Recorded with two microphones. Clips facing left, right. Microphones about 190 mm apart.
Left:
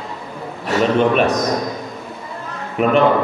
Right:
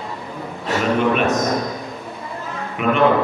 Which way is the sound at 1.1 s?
35° left (ahead or behind).